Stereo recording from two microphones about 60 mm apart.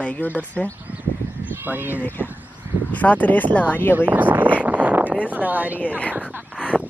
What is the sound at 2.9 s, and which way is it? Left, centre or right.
Speech, left.